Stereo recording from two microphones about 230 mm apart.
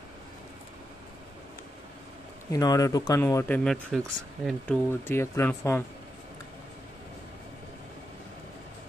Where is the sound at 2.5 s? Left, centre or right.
Centre.